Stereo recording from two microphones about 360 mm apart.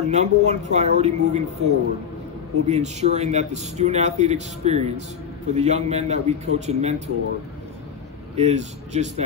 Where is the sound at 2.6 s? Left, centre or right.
Centre.